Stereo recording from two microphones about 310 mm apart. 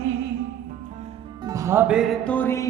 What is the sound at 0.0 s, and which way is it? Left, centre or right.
Music, right.